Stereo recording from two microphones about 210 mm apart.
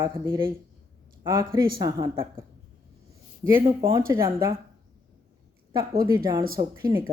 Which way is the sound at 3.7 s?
20° right (ahead or behind).